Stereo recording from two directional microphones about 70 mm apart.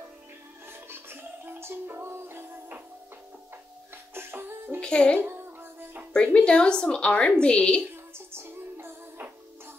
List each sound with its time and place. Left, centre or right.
0.8 s music: right
4.1 s music: right
4.7 s speech: centre
5.2 s music: right
6.1 s a woman's voice: centre
7.9 s music: right